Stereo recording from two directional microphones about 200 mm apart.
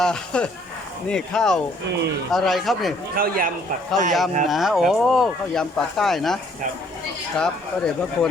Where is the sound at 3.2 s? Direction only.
45° right (ahead or behind).